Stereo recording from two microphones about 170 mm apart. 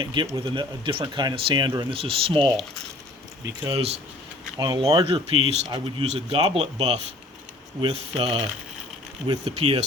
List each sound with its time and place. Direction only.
0.0 s speech: 25° right (ahead or behind)
3.4 s speech: 20° right (ahead or behind)